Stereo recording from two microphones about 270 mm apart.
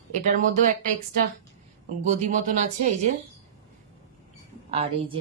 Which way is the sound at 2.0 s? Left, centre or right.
Right.